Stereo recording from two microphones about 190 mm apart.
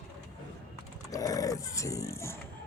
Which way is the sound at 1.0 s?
20° left (ahead or behind).